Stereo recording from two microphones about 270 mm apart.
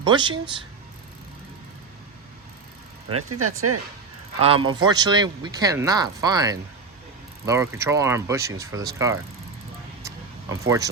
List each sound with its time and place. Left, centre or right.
0.0 s speech: centre
3.1 s speech: right
4.4 s a man's voice: right
10.5 s speech: centre